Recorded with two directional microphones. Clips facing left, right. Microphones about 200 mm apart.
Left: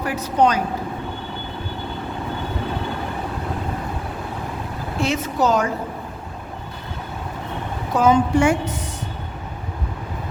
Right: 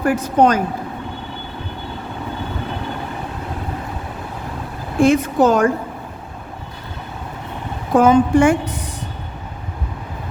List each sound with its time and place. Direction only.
0.0 s a woman's voice: 50° right (ahead or behind)
4.9 s a woman's voice: 50° right (ahead or behind)
7.9 s a woman's voice: 55° right (ahead or behind)